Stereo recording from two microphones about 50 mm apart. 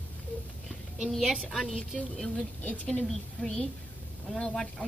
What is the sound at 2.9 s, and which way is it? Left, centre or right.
A woman's voice, centre.